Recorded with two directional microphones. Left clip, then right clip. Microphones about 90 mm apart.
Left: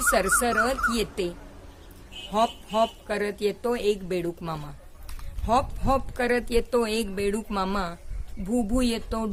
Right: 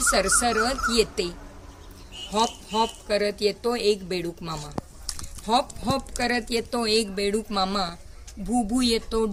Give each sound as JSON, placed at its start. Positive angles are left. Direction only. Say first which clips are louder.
{"t": 0.1, "sound": "speech", "louder": "even", "side_deg": 45}